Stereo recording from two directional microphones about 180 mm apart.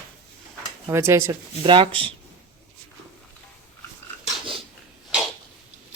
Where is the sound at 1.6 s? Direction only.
30° right (ahead or behind).